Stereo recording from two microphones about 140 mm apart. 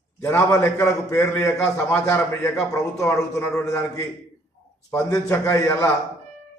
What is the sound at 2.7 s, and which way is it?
A man's voice, 25° left (ahead or behind).